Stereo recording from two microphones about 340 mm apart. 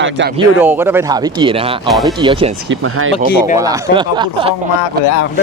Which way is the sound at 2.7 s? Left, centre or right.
Right.